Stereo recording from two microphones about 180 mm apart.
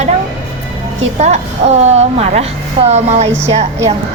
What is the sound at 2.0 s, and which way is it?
A woman's voice, 35° right (ahead or behind).